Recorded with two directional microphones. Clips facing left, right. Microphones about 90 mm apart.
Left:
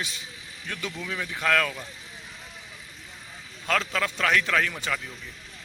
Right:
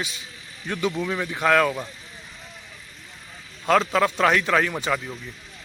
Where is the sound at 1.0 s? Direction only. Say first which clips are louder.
Right 6 dB; 35° right (ahead or behind).